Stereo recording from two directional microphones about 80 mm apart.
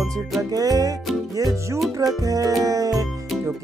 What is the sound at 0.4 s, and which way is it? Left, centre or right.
Speech, right.